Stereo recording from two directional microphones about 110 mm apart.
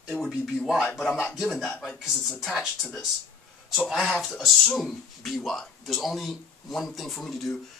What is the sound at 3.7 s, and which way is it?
Speech, centre (ahead or behind).